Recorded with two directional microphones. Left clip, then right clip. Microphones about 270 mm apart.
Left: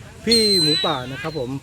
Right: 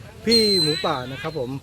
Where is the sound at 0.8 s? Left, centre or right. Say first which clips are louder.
Left 1 dB; centre.